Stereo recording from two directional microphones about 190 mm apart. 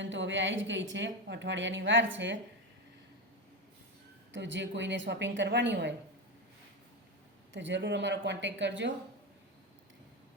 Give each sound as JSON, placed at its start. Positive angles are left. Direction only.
{"t": 0.0, "sound": "a woman's voice", "side_deg": -80}
{"t": 4.3, "sound": "a woman's voice", "side_deg": -70}
{"t": 7.5, "sound": "a woman's voice", "side_deg": -70}